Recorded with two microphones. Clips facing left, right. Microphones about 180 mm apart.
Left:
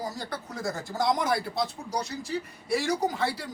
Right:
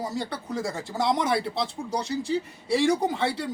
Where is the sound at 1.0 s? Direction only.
25° right (ahead or behind).